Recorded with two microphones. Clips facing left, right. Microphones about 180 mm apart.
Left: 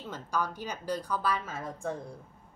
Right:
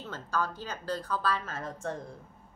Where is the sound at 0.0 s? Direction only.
15° left (ahead or behind).